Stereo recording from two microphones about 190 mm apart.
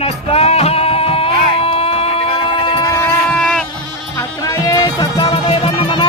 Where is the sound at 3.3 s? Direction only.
5° left (ahead or behind).